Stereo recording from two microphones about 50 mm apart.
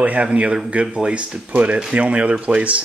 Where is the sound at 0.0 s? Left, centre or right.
Right.